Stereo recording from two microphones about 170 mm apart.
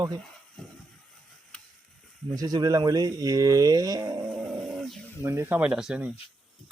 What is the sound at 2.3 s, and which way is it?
Speech, 25° right (ahead or behind).